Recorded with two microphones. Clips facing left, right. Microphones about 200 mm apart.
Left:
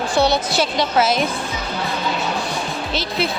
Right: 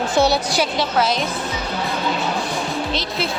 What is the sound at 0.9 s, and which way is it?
Speech, 5° left (ahead or behind).